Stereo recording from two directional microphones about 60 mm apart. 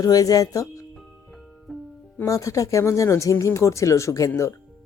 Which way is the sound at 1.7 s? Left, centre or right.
Centre.